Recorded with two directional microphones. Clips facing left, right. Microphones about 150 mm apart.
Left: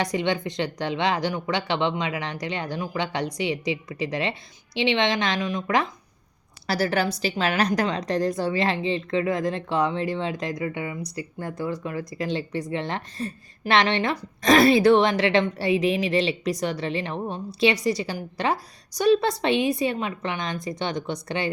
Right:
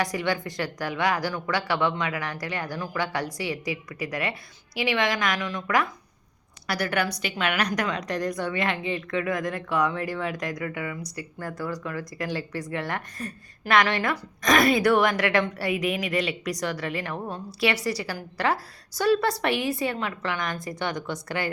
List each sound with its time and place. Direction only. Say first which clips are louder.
0.0 s a woman's voice: left 2 dB; 20° left (ahead or behind)